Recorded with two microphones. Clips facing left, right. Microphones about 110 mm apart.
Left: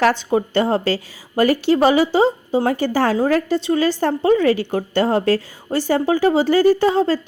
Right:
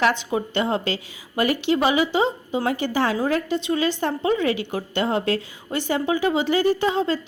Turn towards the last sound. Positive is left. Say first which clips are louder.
# left 5 dB
turn(degrees=40)  # may be behind; listen again after turning